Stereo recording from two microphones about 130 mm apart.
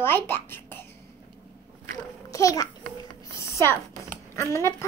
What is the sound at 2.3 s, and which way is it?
A child's voice, 25° left (ahead or behind).